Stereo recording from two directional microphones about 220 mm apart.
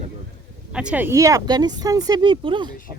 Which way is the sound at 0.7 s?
5° right (ahead or behind).